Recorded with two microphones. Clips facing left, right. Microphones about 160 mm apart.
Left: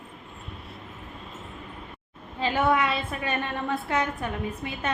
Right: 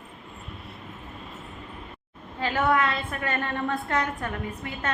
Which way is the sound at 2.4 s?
15° left (ahead or behind).